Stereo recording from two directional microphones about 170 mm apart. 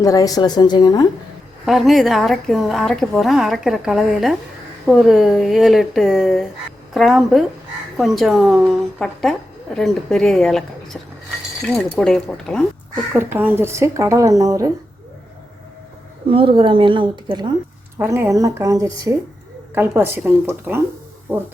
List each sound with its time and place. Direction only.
0.0 s a woman's voice: 20° left (ahead or behind)
1.6 s a woman's voice: centre (ahead or behind)
13.1 s speech: 15° right (ahead or behind)
16.3 s speech: 30° right (ahead or behind)
17.9 s speech: 15° right (ahead or behind)